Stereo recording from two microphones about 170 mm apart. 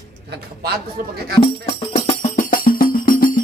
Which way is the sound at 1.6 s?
40° left (ahead or behind).